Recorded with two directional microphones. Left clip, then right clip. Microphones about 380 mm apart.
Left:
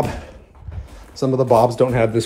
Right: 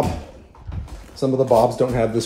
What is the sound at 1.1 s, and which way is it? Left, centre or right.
Speech, left.